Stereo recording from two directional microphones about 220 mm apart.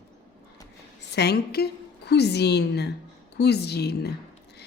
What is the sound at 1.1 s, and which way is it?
A woman's voice, 50° left (ahead or behind).